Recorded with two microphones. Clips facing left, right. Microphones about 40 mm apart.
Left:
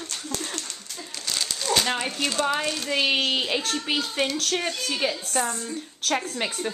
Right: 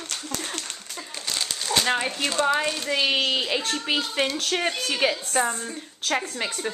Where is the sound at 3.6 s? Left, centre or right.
Centre.